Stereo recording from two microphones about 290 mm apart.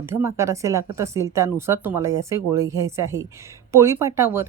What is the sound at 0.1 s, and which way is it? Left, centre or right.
Speech, centre.